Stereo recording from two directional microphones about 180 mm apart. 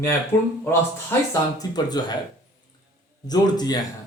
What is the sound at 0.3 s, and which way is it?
A man's voice, 10° left (ahead or behind).